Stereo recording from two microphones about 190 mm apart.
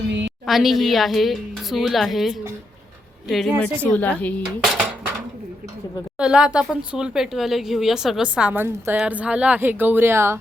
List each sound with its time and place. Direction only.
0.1 s a sound: 70° right (ahead or behind)
0.4 s speech: centre (ahead or behind)
6.1 s speech: 5° right (ahead or behind)